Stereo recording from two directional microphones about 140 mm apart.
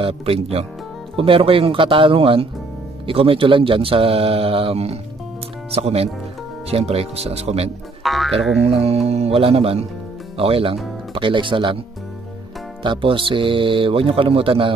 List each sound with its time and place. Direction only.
0.0 s speech: 45° right (ahead or behind)
8.0 s speech: centre (ahead or behind)
8.6 s speech: 45° right (ahead or behind)
12.8 s speech: 35° right (ahead or behind)